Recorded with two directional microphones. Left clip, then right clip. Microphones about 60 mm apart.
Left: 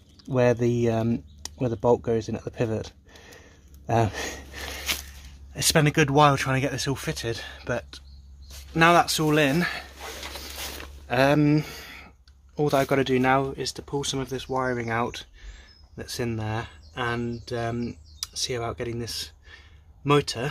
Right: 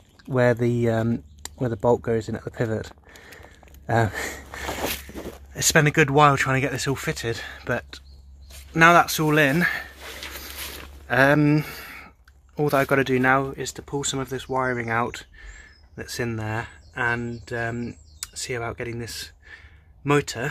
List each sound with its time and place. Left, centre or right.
0.2 s speech: right
3.3 s a sound: right
5.5 s speech: right
5.9 s speech: right
8.7 s speech: right
11.1 s speech: centre
13.8 s speech: right
14.3 s speech: right
16.4 s speech: right
17.6 s speech: centre